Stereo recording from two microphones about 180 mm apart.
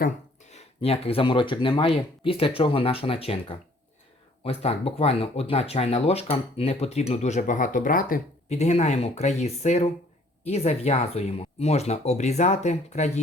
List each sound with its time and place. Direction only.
0.5 s speech: 35° left (ahead or behind)